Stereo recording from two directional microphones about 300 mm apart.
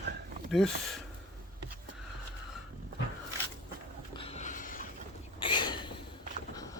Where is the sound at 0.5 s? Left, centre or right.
Centre.